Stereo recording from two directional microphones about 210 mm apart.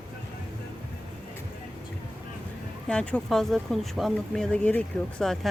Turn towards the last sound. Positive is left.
turn(degrees=0)  # may be behind; listen again after turning